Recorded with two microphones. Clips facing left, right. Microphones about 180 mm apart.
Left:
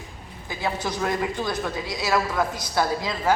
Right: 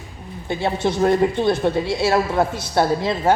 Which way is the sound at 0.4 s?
25° right (ahead or behind).